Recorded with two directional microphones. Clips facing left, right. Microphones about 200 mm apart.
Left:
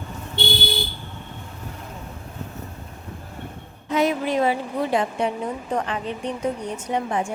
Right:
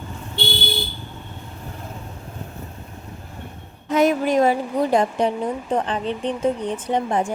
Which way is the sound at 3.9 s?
45° right (ahead or behind).